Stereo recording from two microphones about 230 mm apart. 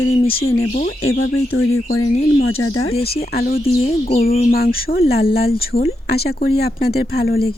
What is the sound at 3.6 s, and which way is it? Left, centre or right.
Speech, left.